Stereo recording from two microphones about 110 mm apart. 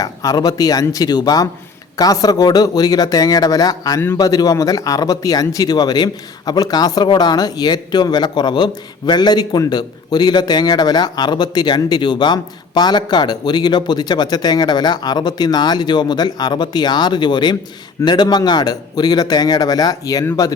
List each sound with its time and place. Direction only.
0.0 s a man's voice: 35° left (ahead or behind)